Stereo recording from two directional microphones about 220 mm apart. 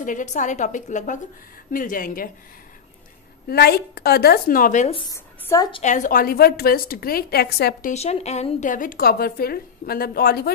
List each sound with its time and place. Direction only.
0.0 s a woman's voice: 35° left (ahead or behind)
3.4 s a woman's voice: 45° left (ahead or behind); by 5.8 s 15° left (ahead or behind)
5.8 s a woman's voice: 35° left (ahead or behind)
7.9 s a woman's voice: 30° left (ahead or behind)